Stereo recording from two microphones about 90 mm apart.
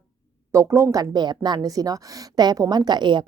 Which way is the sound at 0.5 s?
30° right (ahead or behind).